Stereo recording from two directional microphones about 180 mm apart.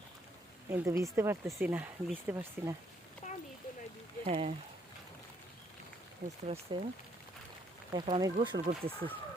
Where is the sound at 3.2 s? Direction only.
40° left (ahead or behind).